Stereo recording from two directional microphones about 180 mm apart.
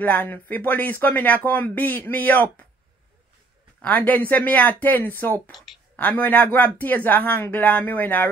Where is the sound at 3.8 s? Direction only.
10° left (ahead or behind).